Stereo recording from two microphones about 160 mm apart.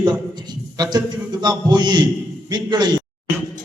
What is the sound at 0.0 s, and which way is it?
A man's voice, 25° right (ahead or behind).